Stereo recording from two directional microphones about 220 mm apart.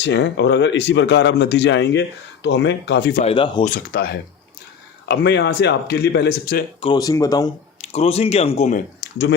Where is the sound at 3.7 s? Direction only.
45° left (ahead or behind).